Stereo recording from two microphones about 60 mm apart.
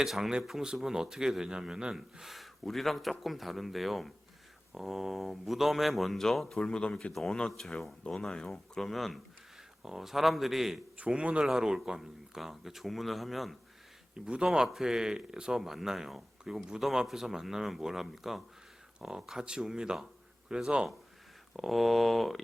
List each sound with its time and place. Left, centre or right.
0.0 s speech: centre
7.1 s speech: centre
10.9 s a man's voice: right
11.4 s speech: centre
14.3 s speech: centre
21.5 s speech: centre